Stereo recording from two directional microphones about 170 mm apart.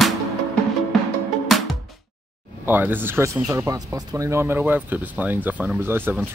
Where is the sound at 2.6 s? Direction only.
10° right (ahead or behind).